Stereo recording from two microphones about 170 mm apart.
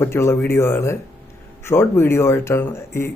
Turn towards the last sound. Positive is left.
turn(degrees=15)  # may be behind; listen again after turning